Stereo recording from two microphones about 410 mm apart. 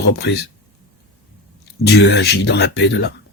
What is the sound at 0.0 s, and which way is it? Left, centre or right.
Speech, left.